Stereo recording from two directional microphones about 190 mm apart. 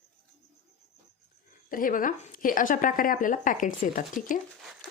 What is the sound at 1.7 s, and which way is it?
Speech, 45° left (ahead or behind).